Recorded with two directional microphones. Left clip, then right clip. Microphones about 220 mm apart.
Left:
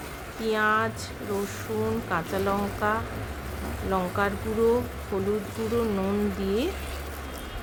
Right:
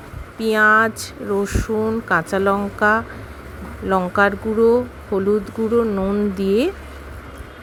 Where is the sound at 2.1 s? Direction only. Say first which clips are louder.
Right 12 dB; 30° right (ahead or behind).